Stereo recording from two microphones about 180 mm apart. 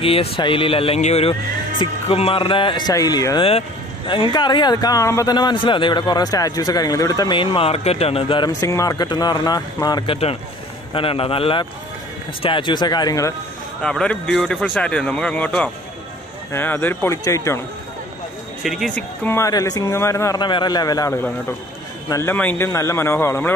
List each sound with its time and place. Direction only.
0.0 s a man's voice: 30° left (ahead or behind)
13.8 s speech: 5° left (ahead or behind)
18.6 s speech: centre (ahead or behind)